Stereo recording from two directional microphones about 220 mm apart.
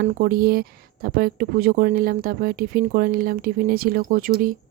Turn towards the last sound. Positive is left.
turn(degrees=-40)  # may be behind; listen again after turning